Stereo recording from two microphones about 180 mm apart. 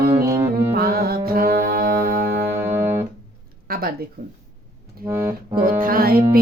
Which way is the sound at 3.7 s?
55° right (ahead or behind).